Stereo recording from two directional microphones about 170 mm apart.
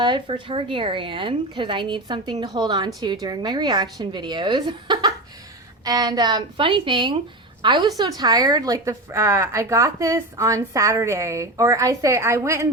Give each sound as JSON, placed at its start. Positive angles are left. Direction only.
{"t": 0.0, "sound": "a woman's voice", "side_deg": -30}